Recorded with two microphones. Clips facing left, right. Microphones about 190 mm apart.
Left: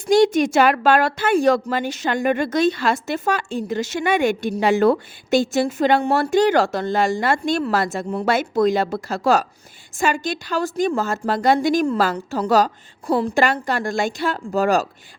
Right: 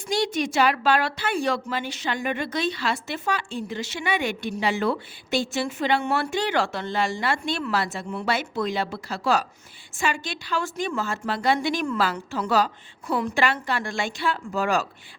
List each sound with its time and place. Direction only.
0.0 s a woman's voice: 45° left (ahead or behind)